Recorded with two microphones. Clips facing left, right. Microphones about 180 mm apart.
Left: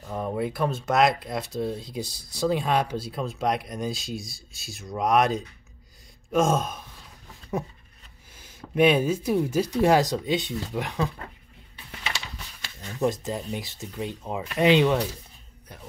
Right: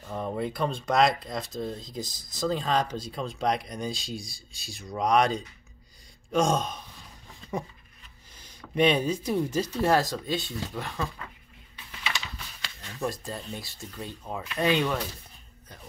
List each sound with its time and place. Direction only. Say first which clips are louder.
0.0 s speech: left 2 dB; 5° left (ahead or behind)
8.7 s speech: left 3 dB; 5° left (ahead or behind)
12.8 s speech: left 7 dB; 20° left (ahead or behind)